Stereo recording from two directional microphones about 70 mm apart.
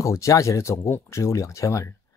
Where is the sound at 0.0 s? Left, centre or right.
Left.